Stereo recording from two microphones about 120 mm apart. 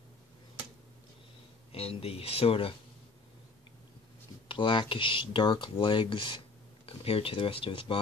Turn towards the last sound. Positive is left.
turn(degrees=45)  # may be behind; listen again after turning